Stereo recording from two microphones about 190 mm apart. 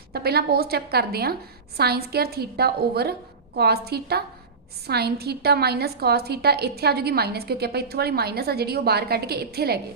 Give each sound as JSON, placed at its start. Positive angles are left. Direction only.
{"t": 0.1, "sound": "a woman's voice", "side_deg": -55}